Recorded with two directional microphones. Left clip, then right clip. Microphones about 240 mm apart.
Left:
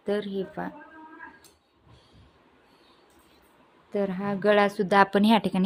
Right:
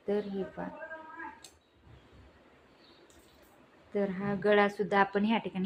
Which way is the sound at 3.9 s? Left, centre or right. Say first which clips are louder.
Left 4 dB; left.